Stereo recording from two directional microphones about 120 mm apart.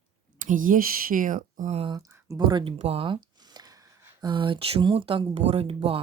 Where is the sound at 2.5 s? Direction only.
40° right (ahead or behind).